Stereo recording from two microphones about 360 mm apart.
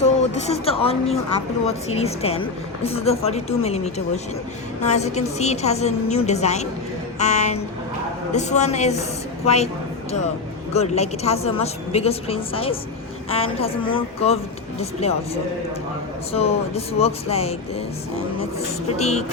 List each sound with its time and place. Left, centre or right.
0.0 s a woman's voice: centre
10.7 s speech: centre
15.0 s speech: centre
16.3 s speech: centre
18.9 s speech: centre